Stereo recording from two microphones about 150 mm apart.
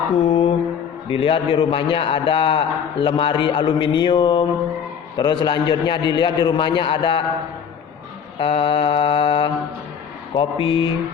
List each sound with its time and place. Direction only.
0.2 s mantra: 40° left (ahead or behind)
1.0 s a man's voice: 35° left (ahead or behind)
8.4 s a man's voice: 40° left (ahead or behind)